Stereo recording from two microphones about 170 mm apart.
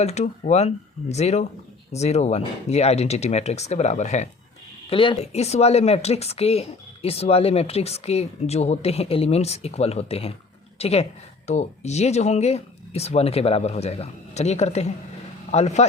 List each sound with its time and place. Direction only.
0.0 s speech: 40° left (ahead or behind)
4.9 s a woman's voice: 30° left (ahead or behind)